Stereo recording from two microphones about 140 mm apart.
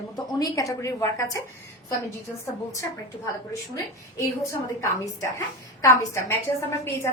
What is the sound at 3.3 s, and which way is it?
A woman's voice, 25° left (ahead or behind).